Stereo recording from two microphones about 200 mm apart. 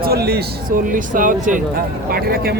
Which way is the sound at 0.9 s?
40° right (ahead or behind).